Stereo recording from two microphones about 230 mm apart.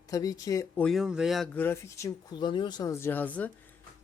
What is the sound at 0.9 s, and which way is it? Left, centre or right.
Speech, centre.